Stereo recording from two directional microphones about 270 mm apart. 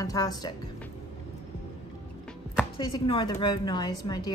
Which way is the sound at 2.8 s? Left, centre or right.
Centre.